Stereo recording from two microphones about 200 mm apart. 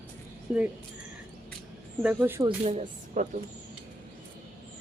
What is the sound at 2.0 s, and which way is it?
Speech, 5° right (ahead or behind).